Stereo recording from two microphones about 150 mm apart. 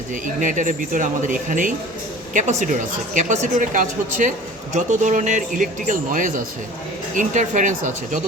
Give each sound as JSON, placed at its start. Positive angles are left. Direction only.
{"t": 0.1, "sound": "a woman's voice", "side_deg": -60}